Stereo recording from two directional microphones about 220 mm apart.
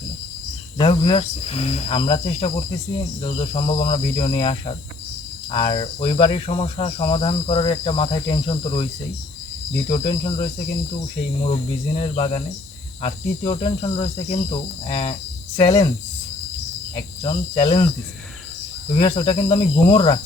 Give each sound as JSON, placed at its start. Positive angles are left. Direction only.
{"t": 0.8, "sound": "speech", "side_deg": 25}
{"t": 9.9, "sound": "speech", "side_deg": 25}
{"t": 11.5, "sound": "speech", "side_deg": 25}
{"t": 16.9, "sound": "speech", "side_deg": 25}
{"t": 18.9, "sound": "speech", "side_deg": 25}